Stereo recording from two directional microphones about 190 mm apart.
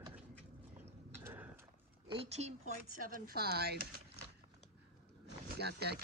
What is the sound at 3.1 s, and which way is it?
Speech, 50° right (ahead or behind).